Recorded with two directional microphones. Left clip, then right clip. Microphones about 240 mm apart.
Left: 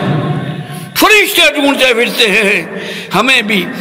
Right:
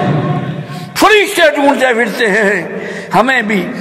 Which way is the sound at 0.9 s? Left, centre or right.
Left.